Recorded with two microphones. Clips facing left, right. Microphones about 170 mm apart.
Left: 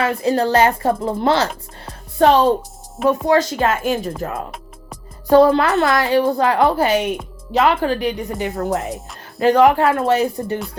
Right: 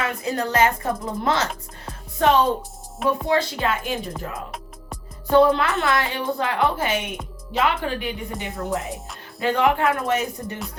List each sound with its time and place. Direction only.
0.0 s a woman's voice: 30° left (ahead or behind)
3.2 s speech: 45° left (ahead or behind)
5.3 s a woman's voice: 40° left (ahead or behind)